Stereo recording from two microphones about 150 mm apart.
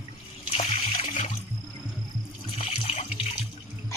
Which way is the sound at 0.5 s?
45° left (ahead or behind).